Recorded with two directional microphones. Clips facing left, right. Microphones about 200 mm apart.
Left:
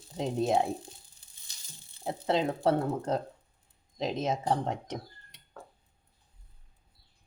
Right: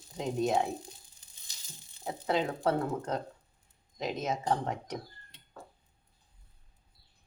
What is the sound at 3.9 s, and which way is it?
Speech, 30° left (ahead or behind).